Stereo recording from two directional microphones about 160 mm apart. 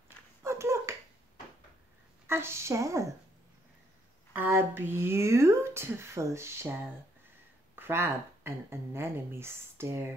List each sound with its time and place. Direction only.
0.4 s a sound: 15° right (ahead or behind)
2.2 s speech: 15° right (ahead or behind)
4.3 s speech: 15° right (ahead or behind)
7.7 s speech: 15° right (ahead or behind)